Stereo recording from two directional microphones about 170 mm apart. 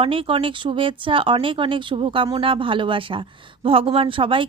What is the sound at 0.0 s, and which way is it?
Speech, 30° right (ahead or behind).